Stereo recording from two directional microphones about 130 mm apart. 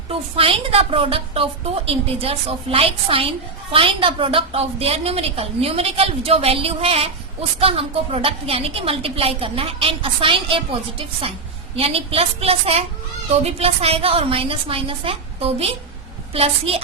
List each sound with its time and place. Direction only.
0.1 s a woman's voice: 45° right (ahead or behind)